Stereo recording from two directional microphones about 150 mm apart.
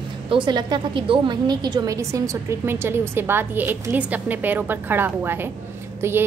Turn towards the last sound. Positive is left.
turn(degrees=-15)  # may be behind; listen again after turning